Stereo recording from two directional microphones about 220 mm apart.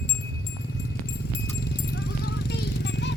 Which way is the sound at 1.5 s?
50° left (ahead or behind).